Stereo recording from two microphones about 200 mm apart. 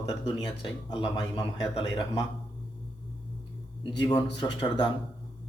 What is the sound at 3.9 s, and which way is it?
Speech, 20° left (ahead or behind).